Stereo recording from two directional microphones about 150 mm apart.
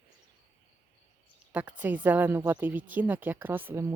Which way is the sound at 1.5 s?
10° right (ahead or behind).